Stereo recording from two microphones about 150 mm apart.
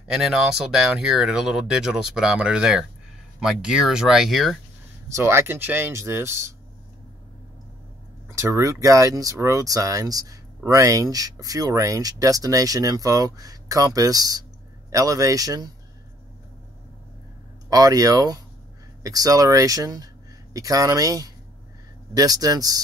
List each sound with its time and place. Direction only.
0.0 s speech: 5° right (ahead or behind)
5.1 s speech: 15° right (ahead or behind)
8.3 s speech: 20° right (ahead or behind)
17.6 s speech: 25° right (ahead or behind)